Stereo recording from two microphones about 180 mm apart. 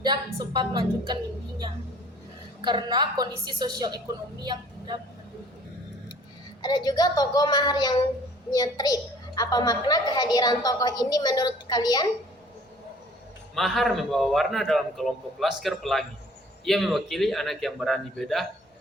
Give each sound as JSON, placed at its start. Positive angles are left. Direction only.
{"t": 0.0, "sound": "a woman's voice", "side_deg": -25}
{"t": 6.6, "sound": "a woman's voice", "side_deg": 20}
{"t": 13.6, "sound": "a man's voice", "side_deg": 0}